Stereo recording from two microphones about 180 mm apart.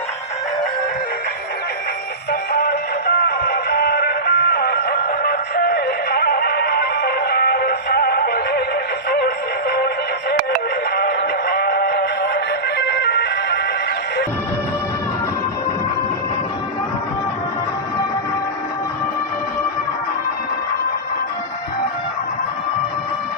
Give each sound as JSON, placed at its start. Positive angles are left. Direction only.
{"t": 2.3, "sound": "music", "side_deg": 55}
{"t": 10.9, "sound": "synthetic singing", "side_deg": 60}